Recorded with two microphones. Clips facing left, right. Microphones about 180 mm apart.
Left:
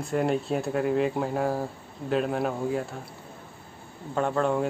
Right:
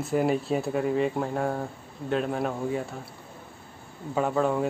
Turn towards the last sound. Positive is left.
turn(degrees=0)  # may be behind; listen again after turning